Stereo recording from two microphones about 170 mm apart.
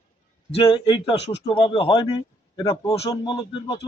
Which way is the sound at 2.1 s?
30° left (ahead or behind).